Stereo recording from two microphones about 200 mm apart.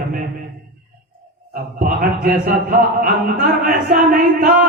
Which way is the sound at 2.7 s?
45° right (ahead or behind).